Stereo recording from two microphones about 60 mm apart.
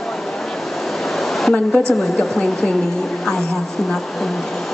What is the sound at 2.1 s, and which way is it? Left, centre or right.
Speech, centre.